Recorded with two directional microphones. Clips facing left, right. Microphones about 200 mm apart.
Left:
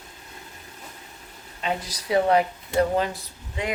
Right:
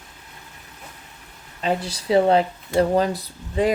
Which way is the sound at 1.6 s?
30° right (ahead or behind).